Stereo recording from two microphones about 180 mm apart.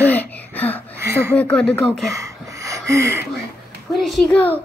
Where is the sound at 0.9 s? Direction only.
15° right (ahead or behind).